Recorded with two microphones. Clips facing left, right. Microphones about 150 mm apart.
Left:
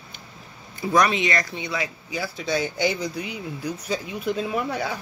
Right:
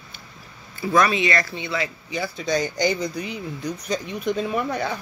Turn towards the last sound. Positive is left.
turn(degrees=5)  # may be behind; listen again after turning